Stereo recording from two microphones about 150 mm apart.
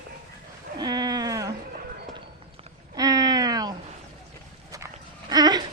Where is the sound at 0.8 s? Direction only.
25° right (ahead or behind).